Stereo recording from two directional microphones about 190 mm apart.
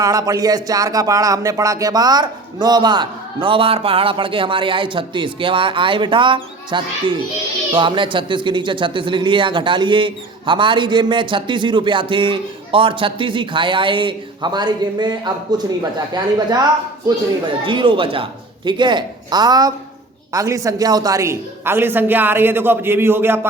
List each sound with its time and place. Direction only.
0.0 s speech: 20° right (ahead or behind)
17.7 s a man's voice: 25° right (ahead or behind)